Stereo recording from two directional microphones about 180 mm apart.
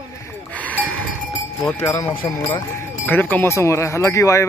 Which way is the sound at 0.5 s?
10° left (ahead or behind).